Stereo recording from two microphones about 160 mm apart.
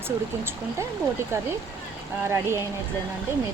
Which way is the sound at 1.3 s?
20° right (ahead or behind).